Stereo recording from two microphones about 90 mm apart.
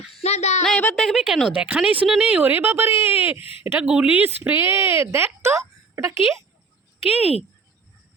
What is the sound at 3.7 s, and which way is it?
Speech, 15° right (ahead or behind).